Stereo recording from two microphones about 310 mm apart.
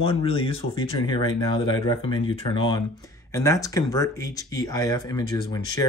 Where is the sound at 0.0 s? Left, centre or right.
Centre.